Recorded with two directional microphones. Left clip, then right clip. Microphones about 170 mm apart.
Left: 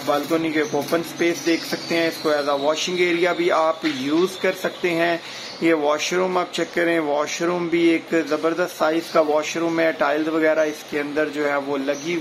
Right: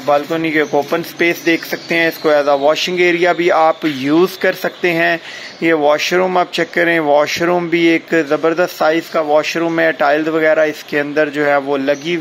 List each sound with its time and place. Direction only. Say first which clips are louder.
0.1 s speech: right 7 dB; 25° right (ahead or behind)